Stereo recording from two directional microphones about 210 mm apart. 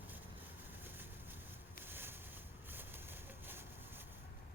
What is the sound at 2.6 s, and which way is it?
Vehicle, 10° right (ahead or behind).